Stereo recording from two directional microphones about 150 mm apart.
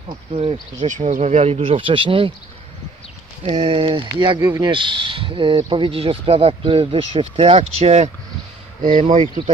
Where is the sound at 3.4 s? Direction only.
35° right (ahead or behind).